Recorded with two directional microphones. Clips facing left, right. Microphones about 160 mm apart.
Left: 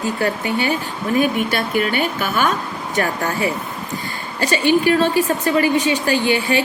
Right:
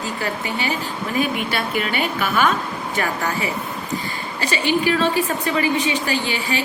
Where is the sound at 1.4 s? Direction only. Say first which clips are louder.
Left 4 dB; 45° left (ahead or behind).